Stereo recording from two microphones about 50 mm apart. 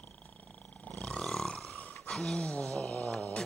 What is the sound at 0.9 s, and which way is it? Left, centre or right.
Roar, centre.